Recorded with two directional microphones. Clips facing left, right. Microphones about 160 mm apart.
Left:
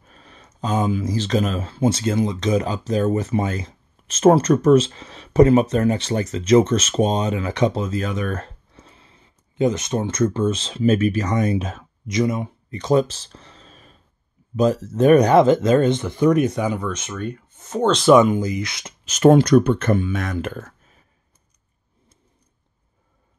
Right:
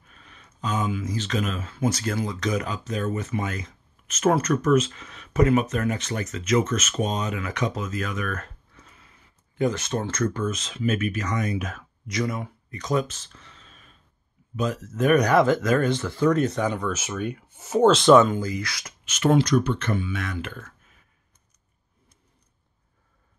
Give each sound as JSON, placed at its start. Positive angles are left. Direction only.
{"t": 0.0, "sound": "speech", "side_deg": 35}
{"t": 16.9, "sound": "speech", "side_deg": -5}
{"t": 18.0, "sound": "speech", "side_deg": 15}
{"t": 19.0, "sound": "speech", "side_deg": 45}